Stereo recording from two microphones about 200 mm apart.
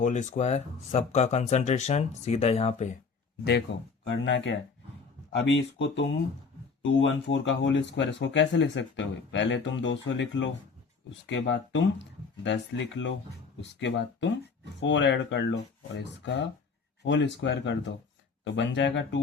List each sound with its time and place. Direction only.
0.0 s speech: 35° left (ahead or behind)
3.7 s speech: 65° left (ahead or behind)